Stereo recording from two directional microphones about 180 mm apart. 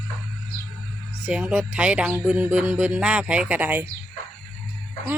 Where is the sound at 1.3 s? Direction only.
5° right (ahead or behind).